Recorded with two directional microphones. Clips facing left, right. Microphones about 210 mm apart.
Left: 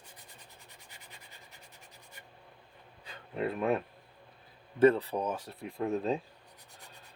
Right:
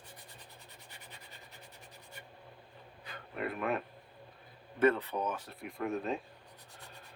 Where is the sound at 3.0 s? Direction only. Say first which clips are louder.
Left 4 dB; 25° left (ahead or behind).